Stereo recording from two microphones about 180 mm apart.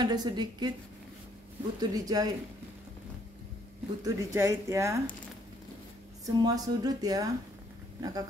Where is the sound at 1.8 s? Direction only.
20° right (ahead or behind).